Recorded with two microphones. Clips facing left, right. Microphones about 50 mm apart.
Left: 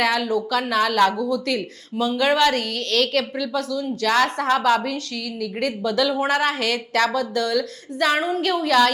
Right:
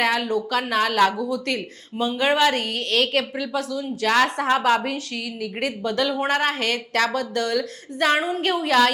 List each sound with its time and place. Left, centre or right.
0.0 s a woman's voice: centre
2.0 s a woman's voice: centre
8.1 s a woman's voice: centre